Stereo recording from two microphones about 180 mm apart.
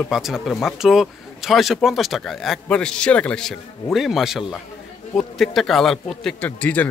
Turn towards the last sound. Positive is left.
turn(degrees=10)  # may be behind; listen again after turning